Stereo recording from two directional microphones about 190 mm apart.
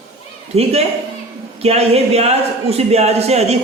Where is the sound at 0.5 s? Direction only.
35° right (ahead or behind).